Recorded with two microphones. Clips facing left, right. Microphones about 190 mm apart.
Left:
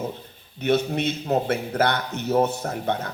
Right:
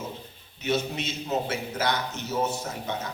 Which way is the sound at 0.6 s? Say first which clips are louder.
Left 6 dB; 60° left (ahead or behind).